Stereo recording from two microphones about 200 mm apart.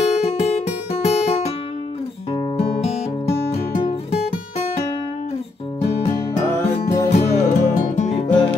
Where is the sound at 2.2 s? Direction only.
30° left (ahead or behind).